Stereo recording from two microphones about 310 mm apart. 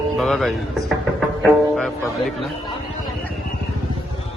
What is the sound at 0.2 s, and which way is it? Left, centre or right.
Speech, centre.